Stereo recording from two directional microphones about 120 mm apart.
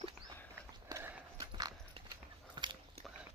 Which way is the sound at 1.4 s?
35° right (ahead or behind).